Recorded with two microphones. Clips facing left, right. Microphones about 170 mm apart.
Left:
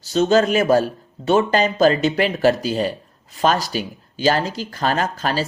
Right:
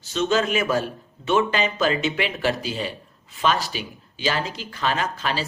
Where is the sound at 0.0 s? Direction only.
40° left (ahead or behind).